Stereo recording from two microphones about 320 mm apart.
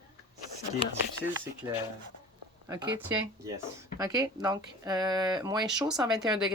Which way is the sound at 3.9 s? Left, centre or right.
Centre.